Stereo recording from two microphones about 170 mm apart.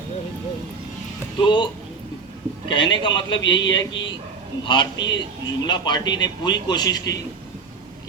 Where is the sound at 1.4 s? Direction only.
25° left (ahead or behind).